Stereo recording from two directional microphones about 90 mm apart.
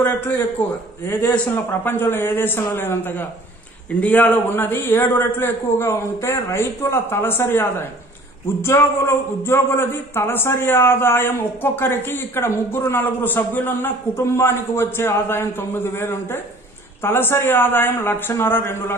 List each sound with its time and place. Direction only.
1.5 s a man's voice: 25° left (ahead or behind)